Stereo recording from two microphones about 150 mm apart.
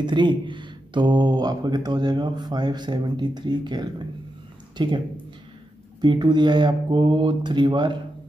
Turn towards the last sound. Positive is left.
turn(degrees=-30)  # may be behind; listen again after turning